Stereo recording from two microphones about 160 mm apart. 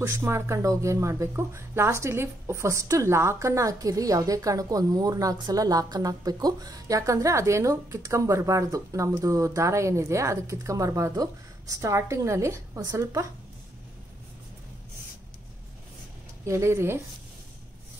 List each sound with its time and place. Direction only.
0.0 s speech: 15° right (ahead or behind)
16.4 s speech: 15° right (ahead or behind)